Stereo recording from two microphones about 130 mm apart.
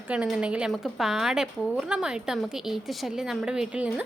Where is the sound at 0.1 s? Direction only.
5° right (ahead or behind).